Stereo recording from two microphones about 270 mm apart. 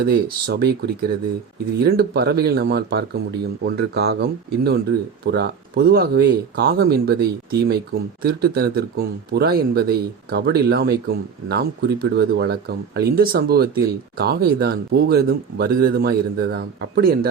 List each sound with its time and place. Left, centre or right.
0.0 s speech: right